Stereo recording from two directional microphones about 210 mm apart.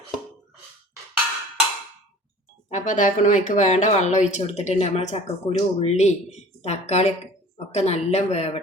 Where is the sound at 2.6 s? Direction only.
35° left (ahead or behind).